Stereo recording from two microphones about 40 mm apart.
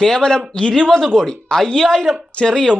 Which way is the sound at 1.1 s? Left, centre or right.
Centre.